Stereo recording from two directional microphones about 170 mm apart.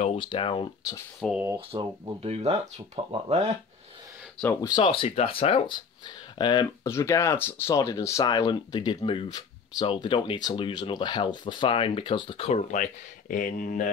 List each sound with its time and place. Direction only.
0.0 s speech: 35° left (ahead or behind)
1.2 s speech: centre (ahead or behind)
1.7 s speech: 30° right (ahead or behind)
4.6 s speech: 25° left (ahead or behind); by 13.8 s 50° left (ahead or behind)